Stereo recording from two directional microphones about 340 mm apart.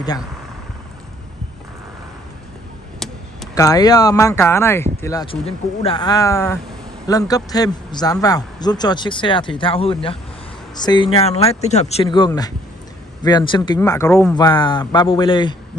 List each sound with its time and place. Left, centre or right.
3.0 s speech: centre